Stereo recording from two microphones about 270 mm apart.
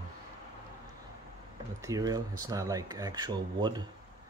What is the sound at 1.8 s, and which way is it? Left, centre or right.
Speech, centre.